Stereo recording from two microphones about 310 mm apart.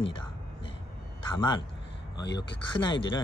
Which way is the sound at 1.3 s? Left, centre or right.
Centre.